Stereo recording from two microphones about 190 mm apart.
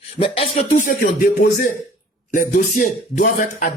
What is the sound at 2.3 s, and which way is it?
Speech, 45° left (ahead or behind).